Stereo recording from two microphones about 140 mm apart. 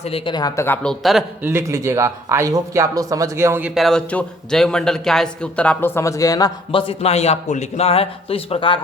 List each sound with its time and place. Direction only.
0.0 s a man's voice: 45° left (ahead or behind)
0.3 s speech: 25° left (ahead or behind)
0.8 s speech: 5° left (ahead or behind)
1.4 s speech: 15° right (ahead or behind)
3.8 s a man's voice: 5° left (ahead or behind); by 6.5 s 25° left (ahead or behind)
6.7 s a man's voice: 40° left (ahead or behind)